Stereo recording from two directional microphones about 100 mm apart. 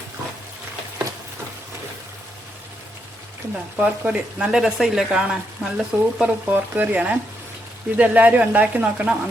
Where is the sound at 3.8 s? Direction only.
15° right (ahead or behind).